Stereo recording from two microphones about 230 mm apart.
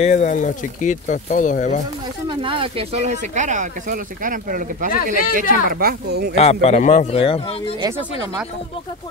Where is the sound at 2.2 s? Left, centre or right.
Right.